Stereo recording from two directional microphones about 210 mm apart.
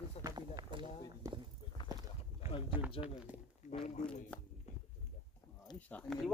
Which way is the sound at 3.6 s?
35° left (ahead or behind).